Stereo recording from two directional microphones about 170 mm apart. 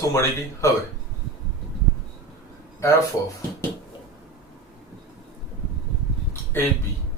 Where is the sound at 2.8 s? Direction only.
15° left (ahead or behind).